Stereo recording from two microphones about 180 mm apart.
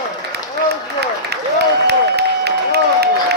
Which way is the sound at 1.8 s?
65° right (ahead or behind).